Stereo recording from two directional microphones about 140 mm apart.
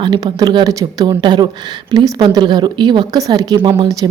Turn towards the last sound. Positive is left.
turn(degrees=-25)  # may be behind; listen again after turning